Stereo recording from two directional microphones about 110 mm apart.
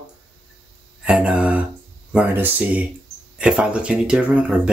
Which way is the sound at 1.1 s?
10° right (ahead or behind).